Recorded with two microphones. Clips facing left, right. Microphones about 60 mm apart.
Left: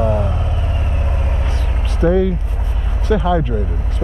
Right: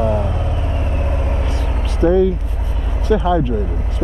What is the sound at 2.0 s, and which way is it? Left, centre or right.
Speech, centre.